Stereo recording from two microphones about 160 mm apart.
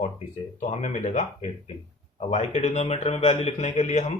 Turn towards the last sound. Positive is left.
turn(degrees=45)  # may be behind; listen again after turning